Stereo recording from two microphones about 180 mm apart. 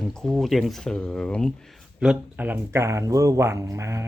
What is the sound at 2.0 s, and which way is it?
Speech, 5° right (ahead or behind).